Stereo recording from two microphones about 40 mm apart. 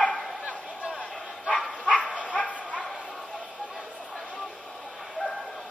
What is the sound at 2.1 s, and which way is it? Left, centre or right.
Dog, left.